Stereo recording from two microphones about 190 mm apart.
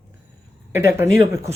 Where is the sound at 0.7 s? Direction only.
15° right (ahead or behind).